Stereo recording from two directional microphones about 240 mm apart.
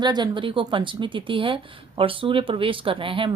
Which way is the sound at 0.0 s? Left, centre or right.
Centre.